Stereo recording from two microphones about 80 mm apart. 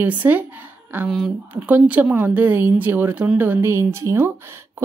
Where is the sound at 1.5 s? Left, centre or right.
Centre.